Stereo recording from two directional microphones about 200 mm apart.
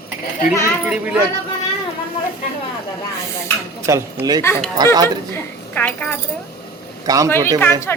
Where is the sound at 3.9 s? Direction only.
15° right (ahead or behind).